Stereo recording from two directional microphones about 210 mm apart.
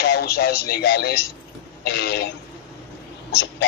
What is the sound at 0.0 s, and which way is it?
Speech, 50° left (ahead or behind).